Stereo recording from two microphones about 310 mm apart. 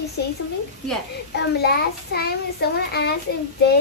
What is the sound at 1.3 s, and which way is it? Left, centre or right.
A woman's voice, left.